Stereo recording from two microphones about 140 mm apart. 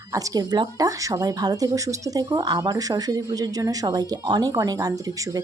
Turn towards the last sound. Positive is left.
turn(degrees=-25)  # may be behind; listen again after turning